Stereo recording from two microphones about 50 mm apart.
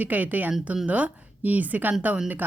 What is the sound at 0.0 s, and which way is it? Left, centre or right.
Speech, right.